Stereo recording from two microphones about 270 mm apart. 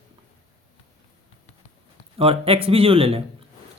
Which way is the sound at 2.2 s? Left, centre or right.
Right.